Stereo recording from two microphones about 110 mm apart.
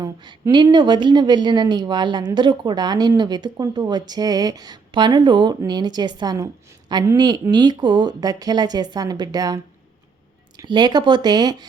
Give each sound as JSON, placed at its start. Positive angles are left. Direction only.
{"t": 0.0, "sound": "a woman's voice", "side_deg": -45}
{"t": 10.7, "sound": "speech", "side_deg": -40}